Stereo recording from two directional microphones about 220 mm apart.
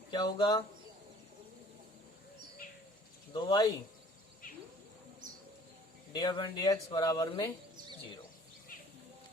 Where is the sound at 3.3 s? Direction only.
20° left (ahead or behind).